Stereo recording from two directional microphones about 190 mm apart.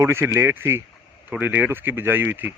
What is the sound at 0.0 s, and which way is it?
Speech, 15° right (ahead or behind).